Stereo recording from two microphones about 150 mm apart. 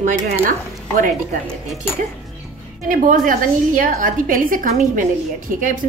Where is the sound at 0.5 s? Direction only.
60° right (ahead or behind).